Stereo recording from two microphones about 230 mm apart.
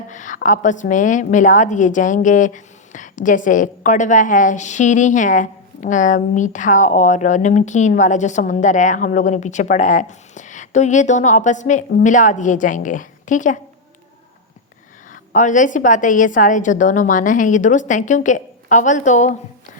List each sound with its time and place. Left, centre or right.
0.1 s a woman's voice: left
15.1 s a woman's voice: left